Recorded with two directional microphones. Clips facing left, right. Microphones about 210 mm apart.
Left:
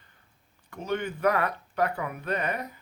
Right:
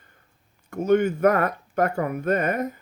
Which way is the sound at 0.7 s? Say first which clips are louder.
Right 11 dB; 45° right (ahead or behind).